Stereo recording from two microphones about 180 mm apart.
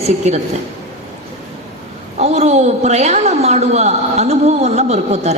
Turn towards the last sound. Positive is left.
turn(degrees=-35)  # may be behind; listen again after turning